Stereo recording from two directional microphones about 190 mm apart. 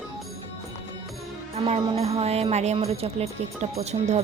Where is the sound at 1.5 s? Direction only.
30° right (ahead or behind).